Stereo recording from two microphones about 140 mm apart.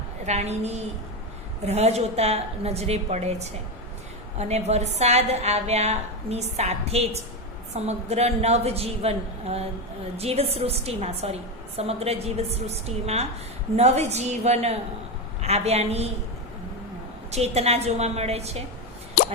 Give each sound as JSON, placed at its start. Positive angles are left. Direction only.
{"t": 0.3, "sound": "a woman's voice", "side_deg": -50}
{"t": 17.3, "sound": "a woman's voice", "side_deg": -50}